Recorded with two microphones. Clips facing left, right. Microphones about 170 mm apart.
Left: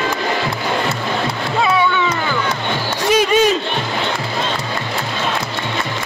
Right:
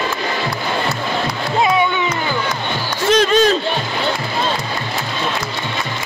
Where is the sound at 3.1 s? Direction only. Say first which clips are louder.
Right 1 dB; 10° left (ahead or behind).